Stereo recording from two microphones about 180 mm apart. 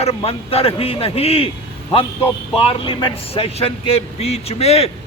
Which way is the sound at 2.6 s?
30° left (ahead or behind).